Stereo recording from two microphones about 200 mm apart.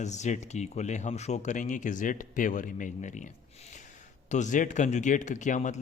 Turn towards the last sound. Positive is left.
turn(degrees=40)  # may be behind; listen again after turning